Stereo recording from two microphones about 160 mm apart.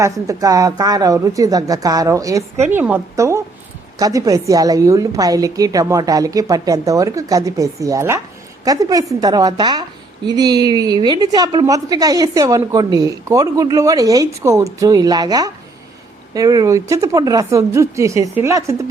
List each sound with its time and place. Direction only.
0.0 s a woman's voice: 20° right (ahead or behind)